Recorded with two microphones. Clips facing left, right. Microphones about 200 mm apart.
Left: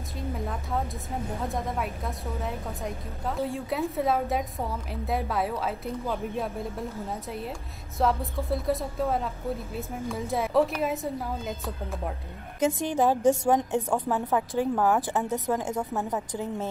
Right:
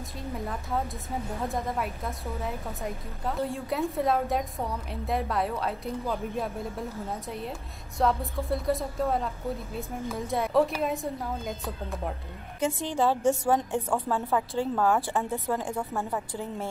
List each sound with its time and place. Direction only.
0.5 s a woman's voice: centre (ahead or behind)
12.5 s a woman's voice: 15° left (ahead or behind)